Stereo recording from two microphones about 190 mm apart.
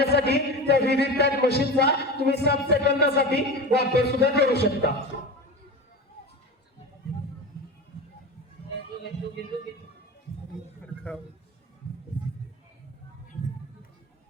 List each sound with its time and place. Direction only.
0.0 s music: 60° left (ahead or behind)